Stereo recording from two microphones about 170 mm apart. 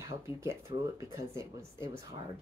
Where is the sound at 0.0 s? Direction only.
15° right (ahead or behind).